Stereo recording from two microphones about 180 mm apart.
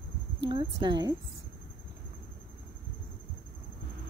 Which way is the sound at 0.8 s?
20° right (ahead or behind).